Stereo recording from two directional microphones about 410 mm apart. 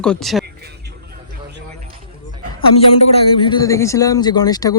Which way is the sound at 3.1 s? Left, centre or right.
Centre.